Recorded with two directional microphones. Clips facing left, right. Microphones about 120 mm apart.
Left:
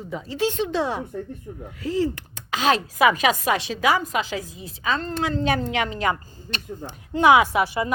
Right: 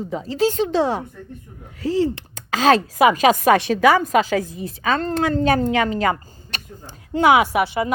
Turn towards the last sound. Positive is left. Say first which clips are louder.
# right 2 dB
turn(degrees=-25)  # may be behind; listen again after turning